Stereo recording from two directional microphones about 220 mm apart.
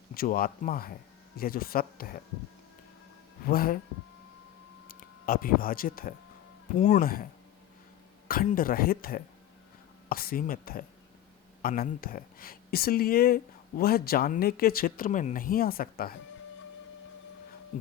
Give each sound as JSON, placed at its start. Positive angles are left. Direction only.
{"t": 0.1, "sound": "speech", "side_deg": 40}
{"t": 3.4, "sound": "speech", "side_deg": 40}
{"t": 4.9, "sound": "speech", "side_deg": 40}
{"t": 8.3, "sound": "speech", "side_deg": 40}